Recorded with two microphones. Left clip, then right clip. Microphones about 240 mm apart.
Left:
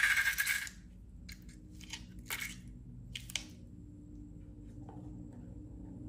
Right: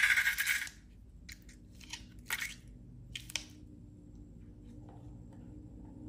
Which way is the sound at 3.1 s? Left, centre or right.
Centre.